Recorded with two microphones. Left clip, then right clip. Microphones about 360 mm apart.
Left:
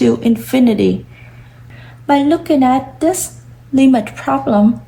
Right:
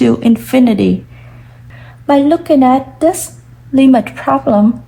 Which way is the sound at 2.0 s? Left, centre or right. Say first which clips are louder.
Right 3 dB; centre.